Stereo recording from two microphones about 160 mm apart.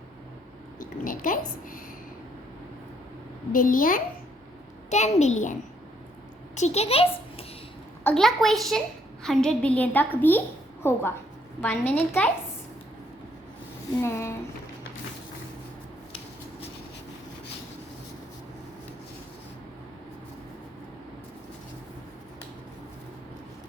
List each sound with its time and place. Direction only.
0.8 s a child's voice: 60° left (ahead or behind)
3.5 s a child's voice: 60° left (ahead or behind)
4.9 s a child's voice: 45° left (ahead or behind)
6.6 s speech: 40° left (ahead or behind)
8.0 s a woman's voice: 5° left (ahead or behind)
14.0 s a woman's voice: 15° left (ahead or behind)